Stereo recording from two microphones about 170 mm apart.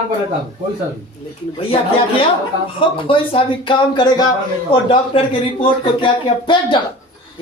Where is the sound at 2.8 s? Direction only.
30° left (ahead or behind).